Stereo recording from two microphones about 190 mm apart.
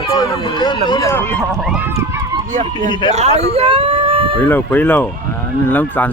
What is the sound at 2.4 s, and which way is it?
Speech, 40° right (ahead or behind).